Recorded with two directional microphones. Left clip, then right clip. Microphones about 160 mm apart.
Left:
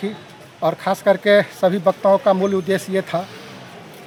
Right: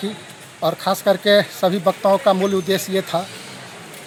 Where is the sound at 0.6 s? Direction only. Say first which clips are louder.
Left 1 dB; centre (ahead or behind).